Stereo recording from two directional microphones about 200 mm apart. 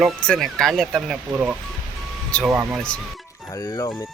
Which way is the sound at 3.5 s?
20° left (ahead or behind).